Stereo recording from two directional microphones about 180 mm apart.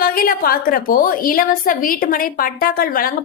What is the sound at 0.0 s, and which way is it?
A woman's voice, 55° left (ahead or behind).